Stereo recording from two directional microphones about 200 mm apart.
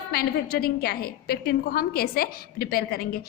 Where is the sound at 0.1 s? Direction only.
50° left (ahead or behind).